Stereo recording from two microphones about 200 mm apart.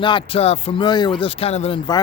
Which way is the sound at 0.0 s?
25° left (ahead or behind).